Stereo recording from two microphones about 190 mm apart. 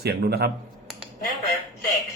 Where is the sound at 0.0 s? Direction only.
55° right (ahead or behind).